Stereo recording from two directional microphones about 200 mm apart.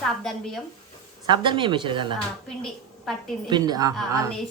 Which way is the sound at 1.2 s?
25° right (ahead or behind).